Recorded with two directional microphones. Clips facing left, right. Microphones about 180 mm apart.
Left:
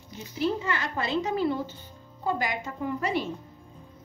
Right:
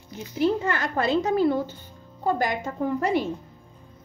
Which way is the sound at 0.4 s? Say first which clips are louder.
Right 5 dB; 50° right (ahead or behind).